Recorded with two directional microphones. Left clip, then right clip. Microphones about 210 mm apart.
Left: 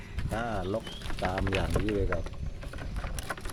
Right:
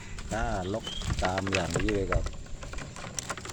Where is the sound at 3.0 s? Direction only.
15° right (ahead or behind).